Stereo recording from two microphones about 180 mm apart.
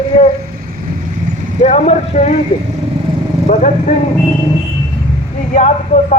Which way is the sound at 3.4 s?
40° left (ahead or behind).